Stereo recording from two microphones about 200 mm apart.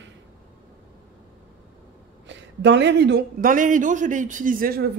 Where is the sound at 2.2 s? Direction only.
60° right (ahead or behind).